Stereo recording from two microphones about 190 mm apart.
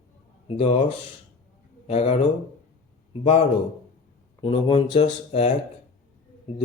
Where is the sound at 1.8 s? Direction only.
35° left (ahead or behind).